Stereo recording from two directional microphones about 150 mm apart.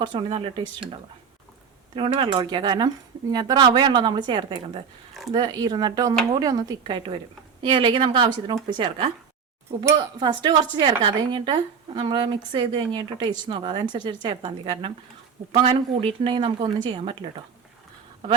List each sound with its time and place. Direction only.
0.0 s a woman's voice: 30° right (ahead or behind)
2.0 s a woman's voice: 35° right (ahead or behind)
10.2 s a woman's voice: 30° right (ahead or behind)